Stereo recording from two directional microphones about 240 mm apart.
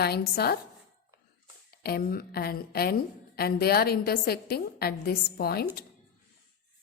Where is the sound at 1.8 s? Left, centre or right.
Left.